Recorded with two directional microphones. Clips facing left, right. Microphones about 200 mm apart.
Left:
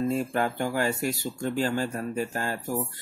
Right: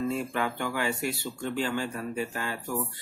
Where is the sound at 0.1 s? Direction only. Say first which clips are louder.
Left 3 dB; 40° left (ahead or behind).